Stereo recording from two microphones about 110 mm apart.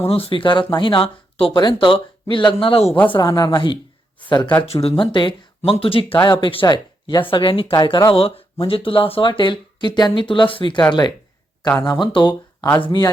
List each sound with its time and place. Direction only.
0.0 s speech: 60° left (ahead or behind)
1.5 s speech: 45° left (ahead or behind)
3.1 s speech: 40° left (ahead or behind)
4.6 s speech: 65° left (ahead or behind)
5.1 s speech: 45° left (ahead or behind)
8.1 s speech: 60° left (ahead or behind)